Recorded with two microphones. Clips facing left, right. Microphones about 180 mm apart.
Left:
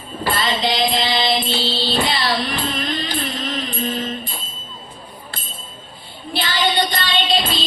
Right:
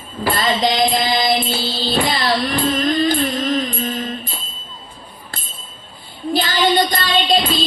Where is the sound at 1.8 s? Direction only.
45° right (ahead or behind).